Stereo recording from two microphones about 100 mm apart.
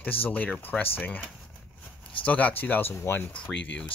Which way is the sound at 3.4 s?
10° left (ahead or behind).